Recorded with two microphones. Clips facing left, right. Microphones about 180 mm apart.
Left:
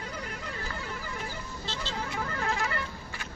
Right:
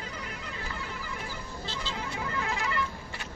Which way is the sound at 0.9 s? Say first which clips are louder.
Left 1 dB; 50° left (ahead or behind).